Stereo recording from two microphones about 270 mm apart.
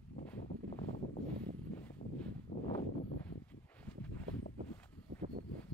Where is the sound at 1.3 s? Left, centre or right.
Centre.